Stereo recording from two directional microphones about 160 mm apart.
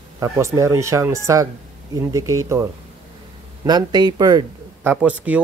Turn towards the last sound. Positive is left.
turn(degrees=-10)  # may be behind; listen again after turning